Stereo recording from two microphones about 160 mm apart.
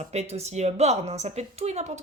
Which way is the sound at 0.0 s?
40° right (ahead or behind).